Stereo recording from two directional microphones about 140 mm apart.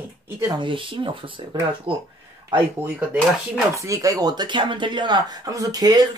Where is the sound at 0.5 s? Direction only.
35° right (ahead or behind).